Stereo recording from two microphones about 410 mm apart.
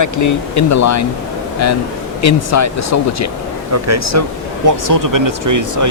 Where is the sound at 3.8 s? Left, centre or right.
Right.